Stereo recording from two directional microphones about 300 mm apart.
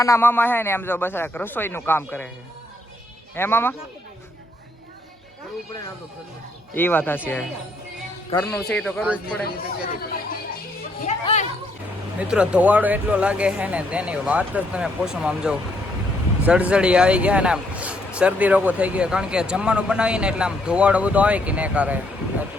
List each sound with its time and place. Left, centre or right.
0.0 s speech: centre
3.3 s speech: centre
6.7 s speech: centre
8.4 s speech: centre
11.0 s a sound: left
12.3 s speech: centre